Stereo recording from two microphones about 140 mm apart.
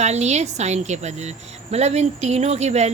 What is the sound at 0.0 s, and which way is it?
A woman's voice, 55° right (ahead or behind).